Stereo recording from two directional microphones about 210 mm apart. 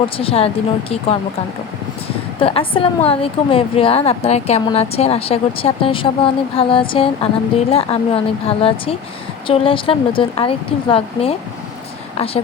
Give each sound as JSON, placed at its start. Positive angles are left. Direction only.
{"t": 0.2, "sound": "a woman's voice", "side_deg": 25}